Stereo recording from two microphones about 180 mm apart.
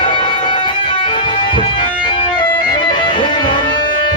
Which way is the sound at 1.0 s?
25° left (ahead or behind).